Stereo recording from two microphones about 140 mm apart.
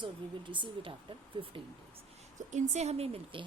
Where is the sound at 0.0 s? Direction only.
35° right (ahead or behind).